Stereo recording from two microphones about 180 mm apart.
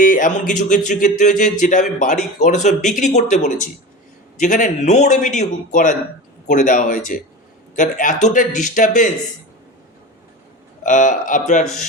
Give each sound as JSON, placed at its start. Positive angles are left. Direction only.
{"t": 0.0, "sound": "a man's voice", "side_deg": 50}
{"t": 10.8, "sound": "a man's voice", "side_deg": 45}